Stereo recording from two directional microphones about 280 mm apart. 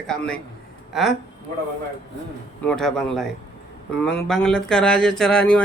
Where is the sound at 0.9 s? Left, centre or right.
Centre.